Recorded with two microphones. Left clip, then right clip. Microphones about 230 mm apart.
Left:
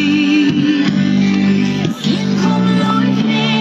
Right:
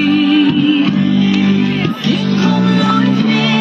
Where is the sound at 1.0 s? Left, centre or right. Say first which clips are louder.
Right 1 dB; centre.